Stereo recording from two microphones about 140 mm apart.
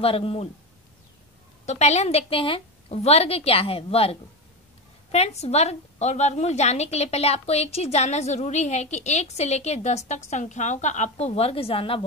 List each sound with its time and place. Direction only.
0.0 s a woman's voice: 40° left (ahead or behind)
1.7 s a woman's voice: 50° left (ahead or behind)